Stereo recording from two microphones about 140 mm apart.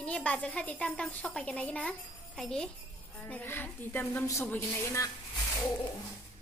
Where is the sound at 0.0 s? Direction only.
10° left (ahead or behind).